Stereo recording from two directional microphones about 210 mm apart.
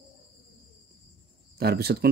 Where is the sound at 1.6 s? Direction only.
50° right (ahead or behind).